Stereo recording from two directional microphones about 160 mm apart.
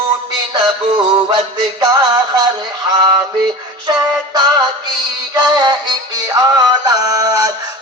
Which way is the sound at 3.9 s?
25° right (ahead or behind).